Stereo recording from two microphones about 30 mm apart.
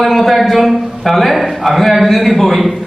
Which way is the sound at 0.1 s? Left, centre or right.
Centre.